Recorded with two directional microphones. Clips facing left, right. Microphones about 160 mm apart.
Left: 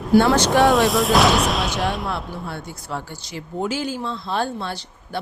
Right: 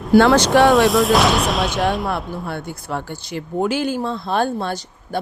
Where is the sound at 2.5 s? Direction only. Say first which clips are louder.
Right 4 dB; 60° right (ahead or behind).